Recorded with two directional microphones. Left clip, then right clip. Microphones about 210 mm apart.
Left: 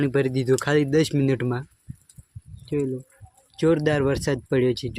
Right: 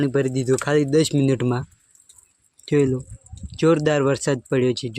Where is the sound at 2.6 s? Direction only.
20° right (ahead or behind).